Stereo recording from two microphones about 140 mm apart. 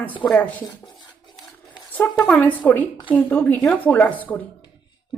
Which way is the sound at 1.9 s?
10° left (ahead or behind).